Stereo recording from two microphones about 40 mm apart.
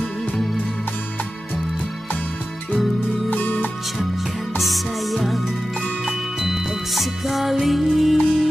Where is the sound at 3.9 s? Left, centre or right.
Centre.